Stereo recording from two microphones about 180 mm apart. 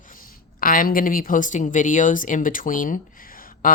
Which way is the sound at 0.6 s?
50° left (ahead or behind).